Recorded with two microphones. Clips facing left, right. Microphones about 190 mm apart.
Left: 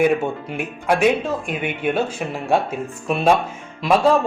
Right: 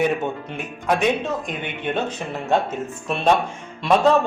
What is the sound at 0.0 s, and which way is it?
Speech, 10° left (ahead or behind).